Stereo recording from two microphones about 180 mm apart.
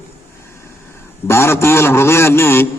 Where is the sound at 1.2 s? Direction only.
15° left (ahead or behind).